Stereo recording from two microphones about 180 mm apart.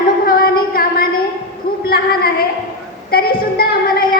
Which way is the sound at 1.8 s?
55° left (ahead or behind).